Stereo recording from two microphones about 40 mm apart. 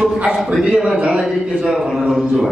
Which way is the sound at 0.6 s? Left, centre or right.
Right.